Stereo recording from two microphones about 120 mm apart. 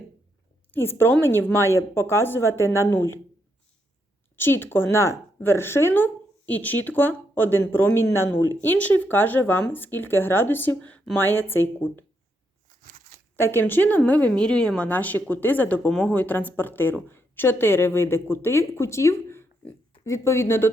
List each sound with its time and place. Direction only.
0.7 s a woman's voice: 20° left (ahead or behind)
4.4 s speech: 20° left (ahead or behind)
13.3 s a woman's voice: 20° left (ahead or behind)